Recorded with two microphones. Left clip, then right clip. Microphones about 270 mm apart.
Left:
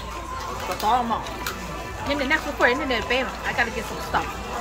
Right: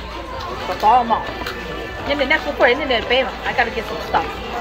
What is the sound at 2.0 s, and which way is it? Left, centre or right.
Speech, centre.